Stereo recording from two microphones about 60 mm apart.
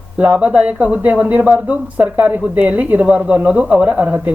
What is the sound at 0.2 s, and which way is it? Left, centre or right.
Speech, right.